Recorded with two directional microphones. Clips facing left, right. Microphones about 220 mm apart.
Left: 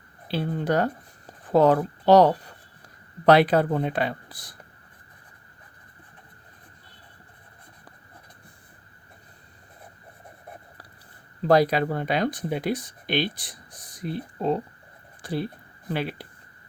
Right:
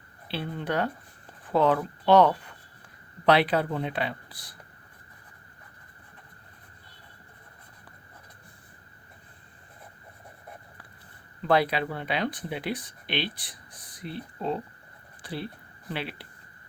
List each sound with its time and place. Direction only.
0.3 s speech: 45° left (ahead or behind)
11.4 s speech: 40° left (ahead or behind)
15.2 s a sound: 45° left (ahead or behind)
15.9 s speech: 45° left (ahead or behind)